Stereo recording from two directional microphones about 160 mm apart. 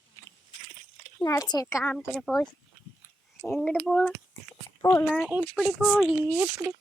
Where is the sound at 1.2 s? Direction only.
25° left (ahead or behind).